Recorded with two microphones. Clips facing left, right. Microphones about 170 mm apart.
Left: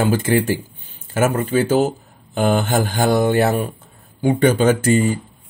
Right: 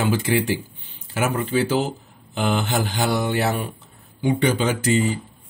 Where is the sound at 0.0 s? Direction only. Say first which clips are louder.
Left 4 dB; 45° left (ahead or behind).